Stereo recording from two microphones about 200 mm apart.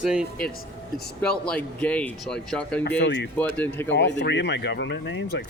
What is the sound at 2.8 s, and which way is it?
Speech, 60° left (ahead or behind).